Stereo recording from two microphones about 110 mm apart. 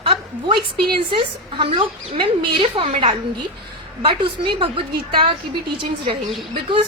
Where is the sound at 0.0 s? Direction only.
50° right (ahead or behind).